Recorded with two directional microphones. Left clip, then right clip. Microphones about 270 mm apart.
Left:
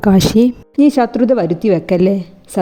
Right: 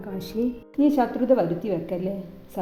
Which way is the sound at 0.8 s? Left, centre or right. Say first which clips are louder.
Left 10 dB; left.